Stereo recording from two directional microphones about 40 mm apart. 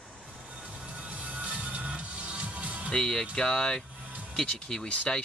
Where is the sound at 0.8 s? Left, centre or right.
Right.